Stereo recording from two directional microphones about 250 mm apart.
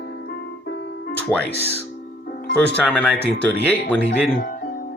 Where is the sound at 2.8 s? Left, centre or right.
Centre.